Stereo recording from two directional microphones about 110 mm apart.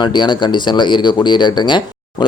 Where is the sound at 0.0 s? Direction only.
45° left (ahead or behind).